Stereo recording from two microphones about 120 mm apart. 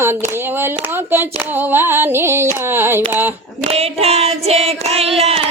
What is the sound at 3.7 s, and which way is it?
Female singing, 55° right (ahead or behind).